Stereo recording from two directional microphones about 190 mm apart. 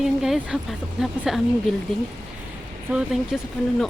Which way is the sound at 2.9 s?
5° right (ahead or behind).